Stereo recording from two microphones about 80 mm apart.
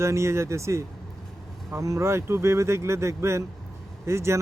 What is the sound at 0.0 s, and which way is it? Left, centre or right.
Speech, right.